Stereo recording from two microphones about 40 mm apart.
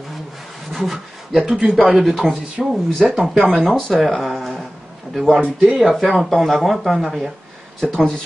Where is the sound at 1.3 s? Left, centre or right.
Right.